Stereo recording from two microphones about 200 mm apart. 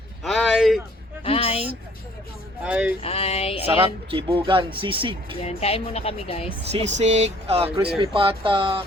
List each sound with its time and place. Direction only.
0.2 s a sound: centre (ahead or behind)
1.2 s a sound: 30° left (ahead or behind)
2.6 s speech: 5° right (ahead or behind)
3.0 s speech: 30° left (ahead or behind)
4.1 s speech: 25° right (ahead or behind)
5.5 s speech: 30° left (ahead or behind)
6.7 s speech: 35° right (ahead or behind)